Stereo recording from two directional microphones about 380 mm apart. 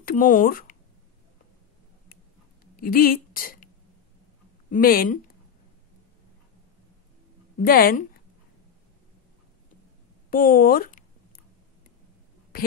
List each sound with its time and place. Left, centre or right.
0.0 s speech: left
2.6 s a sound: left
4.6 s speech: left
7.6 s speech: left
10.3 s a sound: left
12.5 s a woman's voice: left